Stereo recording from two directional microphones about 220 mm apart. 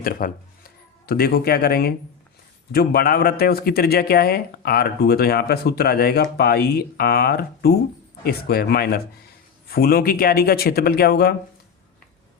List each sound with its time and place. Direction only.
0.0 s speech: 40° left (ahead or behind)